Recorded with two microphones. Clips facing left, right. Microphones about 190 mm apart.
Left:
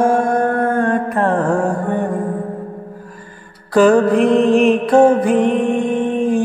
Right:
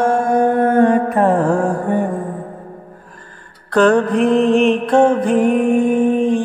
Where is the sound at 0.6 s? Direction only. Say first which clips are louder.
Right 4 dB; 20° right (ahead or behind).